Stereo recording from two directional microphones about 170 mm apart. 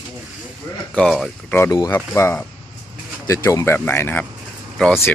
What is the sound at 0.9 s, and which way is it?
Speech, centre (ahead or behind).